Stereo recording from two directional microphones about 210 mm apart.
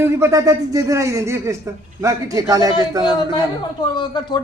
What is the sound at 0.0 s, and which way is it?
Speech, 15° right (ahead or behind).